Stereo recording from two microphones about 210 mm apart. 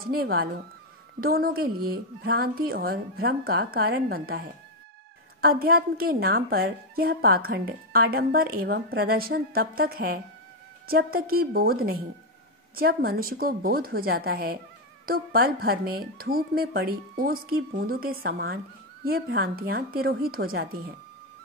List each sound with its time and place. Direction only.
0.1 s a woman's voice: 45° right (ahead or behind)
5.4 s a woman's voice: 45° right (ahead or behind)